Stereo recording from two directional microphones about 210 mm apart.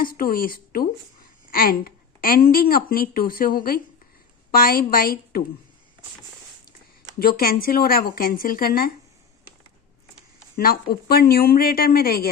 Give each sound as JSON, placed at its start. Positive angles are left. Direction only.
{"t": 0.0, "sound": "speech", "side_deg": 45}
{"t": 7.2, "sound": "speech", "side_deg": 45}
{"t": 10.6, "sound": "speech", "side_deg": 45}